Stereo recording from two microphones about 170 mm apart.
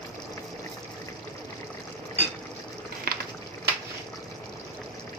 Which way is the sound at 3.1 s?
60° right (ahead or behind).